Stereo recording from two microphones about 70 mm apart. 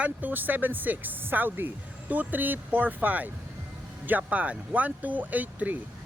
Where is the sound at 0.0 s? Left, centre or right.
Right.